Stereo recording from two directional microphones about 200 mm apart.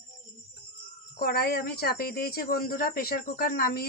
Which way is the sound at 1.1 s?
50° left (ahead or behind).